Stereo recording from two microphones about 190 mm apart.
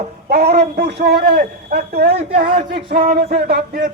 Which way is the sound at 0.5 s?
60° right (ahead or behind).